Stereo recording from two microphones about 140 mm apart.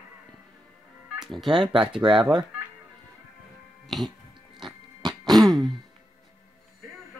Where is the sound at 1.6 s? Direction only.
35° right (ahead or behind).